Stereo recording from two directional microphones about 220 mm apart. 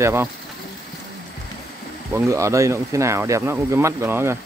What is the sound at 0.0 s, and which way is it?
Speech, 10° right (ahead or behind).